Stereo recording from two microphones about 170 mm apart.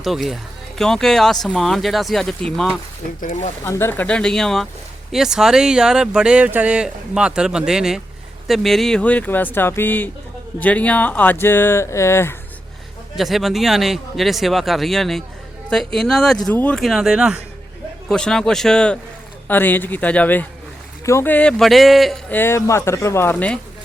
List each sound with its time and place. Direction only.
0.0 s speech: centre (ahead or behind)
3.2 s speech: 55° left (ahead or behind)
3.6 s speech: 15° left (ahead or behind)
13.1 s speech: centre (ahead or behind)
22.3 s speech: 15° left (ahead or behind)